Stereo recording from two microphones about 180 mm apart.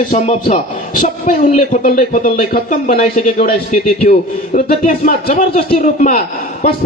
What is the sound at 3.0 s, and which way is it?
Speech, 40° left (ahead or behind).